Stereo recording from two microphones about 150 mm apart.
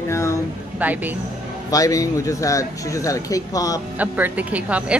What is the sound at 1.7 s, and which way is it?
Speech, 25° left (ahead or behind).